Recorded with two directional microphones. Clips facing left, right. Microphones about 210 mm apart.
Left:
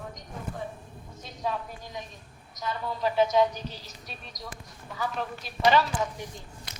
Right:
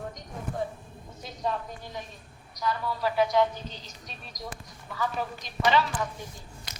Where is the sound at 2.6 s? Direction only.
20° left (ahead or behind).